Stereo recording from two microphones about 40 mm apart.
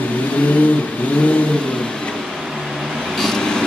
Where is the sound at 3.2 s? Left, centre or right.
Centre.